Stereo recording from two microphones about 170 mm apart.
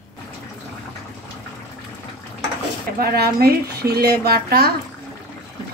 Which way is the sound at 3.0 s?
65° right (ahead or behind).